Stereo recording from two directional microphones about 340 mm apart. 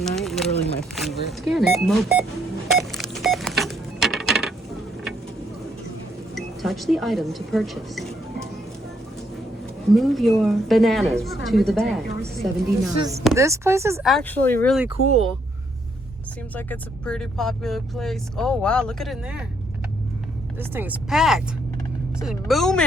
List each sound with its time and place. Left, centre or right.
0.0 s a sound: centre
1.3 s speech: centre
2.7 s a sound: centre
6.3 s speech: centre
9.9 s speech: centre
14.8 s speech: centre
16.6 s speech: centre
20.6 s speech: centre